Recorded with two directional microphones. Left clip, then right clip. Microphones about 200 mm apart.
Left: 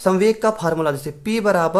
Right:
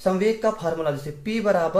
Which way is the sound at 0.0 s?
45° left (ahead or behind).